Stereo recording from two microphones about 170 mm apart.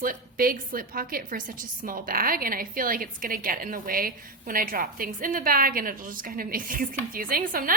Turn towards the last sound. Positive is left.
turn(degrees=-60)  # may be behind; listen again after turning